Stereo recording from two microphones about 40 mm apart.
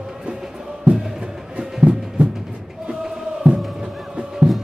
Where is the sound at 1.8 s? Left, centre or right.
Right.